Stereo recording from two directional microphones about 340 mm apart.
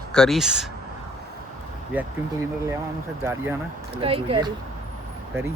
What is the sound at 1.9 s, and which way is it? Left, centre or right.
Speech, centre.